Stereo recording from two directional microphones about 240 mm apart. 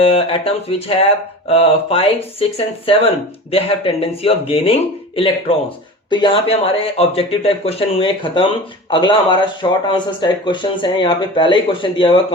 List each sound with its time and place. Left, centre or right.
0.0 s speech: left